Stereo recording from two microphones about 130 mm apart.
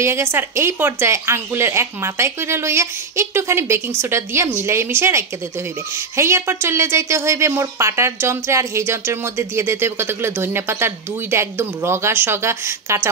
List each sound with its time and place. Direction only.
0.0 s a woman's voice: 20° right (ahead or behind)